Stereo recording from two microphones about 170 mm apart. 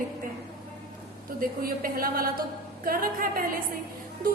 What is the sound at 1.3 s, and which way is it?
A woman's voice, 60° right (ahead or behind).